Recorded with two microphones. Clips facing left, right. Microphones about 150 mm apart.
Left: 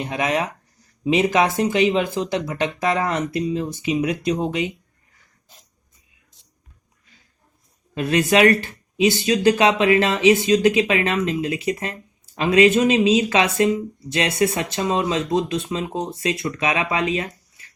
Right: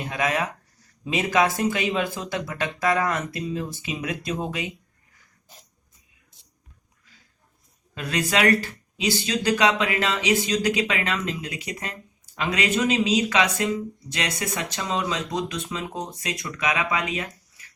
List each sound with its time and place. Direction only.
0.0 s speech: 25° left (ahead or behind)
7.9 s speech: 25° left (ahead or behind)